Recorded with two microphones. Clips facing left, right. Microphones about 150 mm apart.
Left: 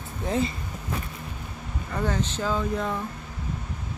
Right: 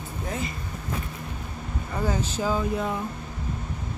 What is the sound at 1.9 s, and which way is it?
Speech, 10° right (ahead or behind).